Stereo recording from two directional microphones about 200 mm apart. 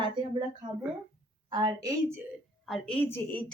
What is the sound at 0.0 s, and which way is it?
A woman's voice, 25° right (ahead or behind).